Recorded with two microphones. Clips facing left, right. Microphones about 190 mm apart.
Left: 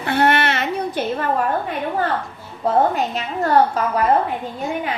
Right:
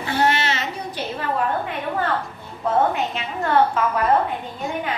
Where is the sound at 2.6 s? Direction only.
35° left (ahead or behind).